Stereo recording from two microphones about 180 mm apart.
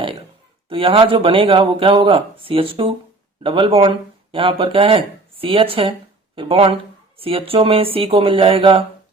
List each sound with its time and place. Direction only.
0.7 s speech: 30° right (ahead or behind)